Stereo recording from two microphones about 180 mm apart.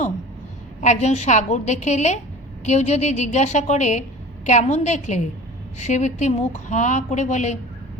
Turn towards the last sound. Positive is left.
turn(degrees=40)  # may be behind; listen again after turning